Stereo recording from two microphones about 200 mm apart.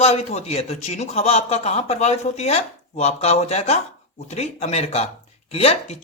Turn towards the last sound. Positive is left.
turn(degrees=30)  # may be behind; listen again after turning